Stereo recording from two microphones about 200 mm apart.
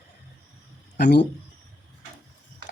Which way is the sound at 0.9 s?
55° left (ahead or behind).